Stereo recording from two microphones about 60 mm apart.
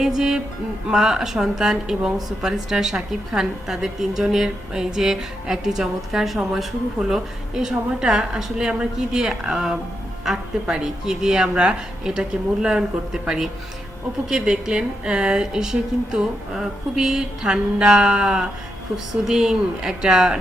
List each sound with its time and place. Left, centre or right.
0.2 s speech: centre
13.2 s speech: centre